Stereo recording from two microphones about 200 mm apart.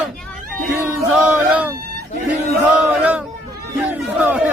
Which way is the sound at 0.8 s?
5° right (ahead or behind).